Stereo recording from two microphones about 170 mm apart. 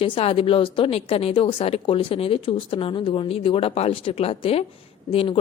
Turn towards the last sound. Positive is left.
turn(degrees=35)  # may be behind; listen again after turning